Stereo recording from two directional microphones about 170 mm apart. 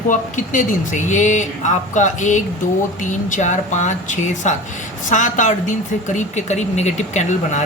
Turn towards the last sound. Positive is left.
turn(degrees=45)  # may be behind; listen again after turning